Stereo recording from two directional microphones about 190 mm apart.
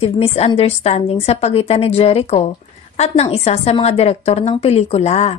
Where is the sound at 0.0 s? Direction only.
30° left (ahead or behind).